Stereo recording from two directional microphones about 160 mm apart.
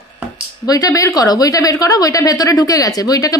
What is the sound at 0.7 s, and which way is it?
A woman's voice, 25° left (ahead or behind).